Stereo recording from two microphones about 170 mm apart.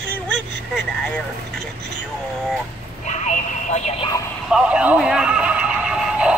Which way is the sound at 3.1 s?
45° left (ahead or behind).